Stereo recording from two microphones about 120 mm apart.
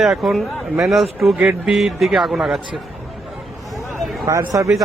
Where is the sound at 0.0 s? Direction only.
Centre (ahead or behind).